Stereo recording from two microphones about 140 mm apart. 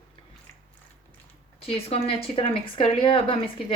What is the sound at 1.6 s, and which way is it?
Speech, 45° left (ahead or behind).